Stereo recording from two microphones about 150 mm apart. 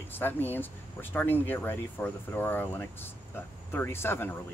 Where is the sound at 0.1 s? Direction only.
15° left (ahead or behind).